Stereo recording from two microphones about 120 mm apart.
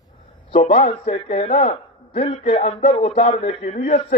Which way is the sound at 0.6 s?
75° left (ahead or behind).